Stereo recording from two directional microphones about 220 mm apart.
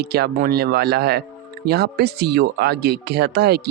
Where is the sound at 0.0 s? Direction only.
45° right (ahead or behind).